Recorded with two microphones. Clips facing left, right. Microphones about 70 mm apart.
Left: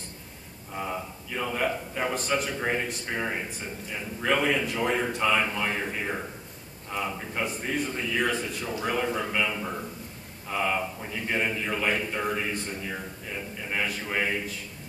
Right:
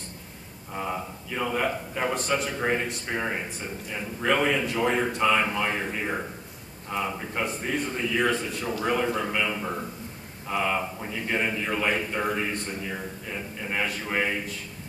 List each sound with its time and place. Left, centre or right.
0.7 s a man's voice: centre